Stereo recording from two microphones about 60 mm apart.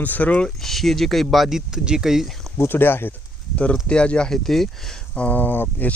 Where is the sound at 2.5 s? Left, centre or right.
Left.